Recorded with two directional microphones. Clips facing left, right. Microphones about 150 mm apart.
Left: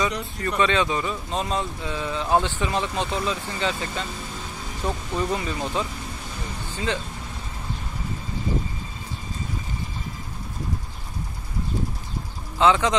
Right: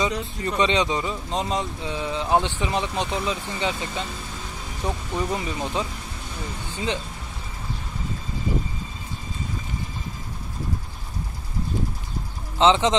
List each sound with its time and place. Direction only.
0.0 s speech: 20° right (ahead or behind)
12.5 s speech: 20° right (ahead or behind)